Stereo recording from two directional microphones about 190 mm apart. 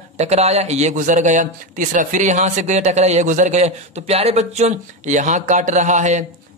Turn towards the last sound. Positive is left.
turn(degrees=-40)  # may be behind; listen again after turning